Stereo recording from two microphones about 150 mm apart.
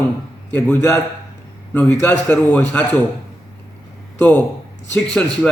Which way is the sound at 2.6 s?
10° left (ahead or behind).